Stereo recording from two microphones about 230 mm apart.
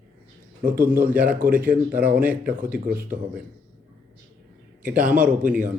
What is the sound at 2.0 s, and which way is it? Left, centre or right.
Speech, right.